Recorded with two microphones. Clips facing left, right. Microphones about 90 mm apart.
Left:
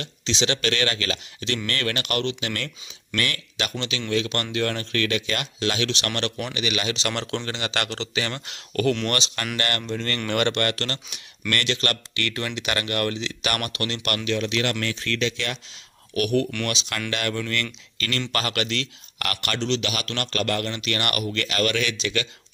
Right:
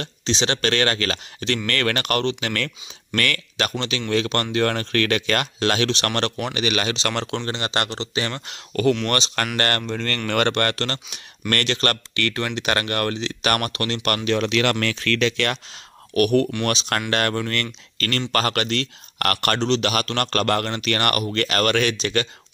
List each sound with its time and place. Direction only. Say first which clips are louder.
0.0 s speech: right 2 dB; 40° right (ahead or behind)
14.3 s speech: right 4 dB; 65° right (ahead or behind)
16.2 s speech: right 4 dB; 50° right (ahead or behind)